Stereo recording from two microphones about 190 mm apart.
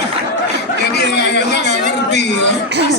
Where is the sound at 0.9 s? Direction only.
60° left (ahead or behind).